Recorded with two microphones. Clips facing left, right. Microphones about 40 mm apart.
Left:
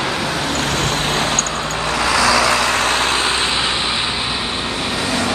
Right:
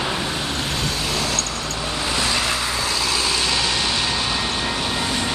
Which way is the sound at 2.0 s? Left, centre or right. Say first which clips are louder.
Left 8 dB; left.